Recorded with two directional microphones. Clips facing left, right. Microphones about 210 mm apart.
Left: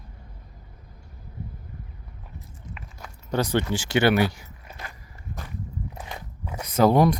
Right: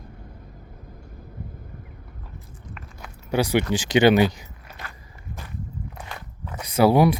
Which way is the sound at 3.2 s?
10° right (ahead or behind).